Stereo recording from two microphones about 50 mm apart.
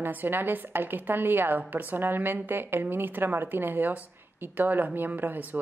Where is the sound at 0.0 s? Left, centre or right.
Right.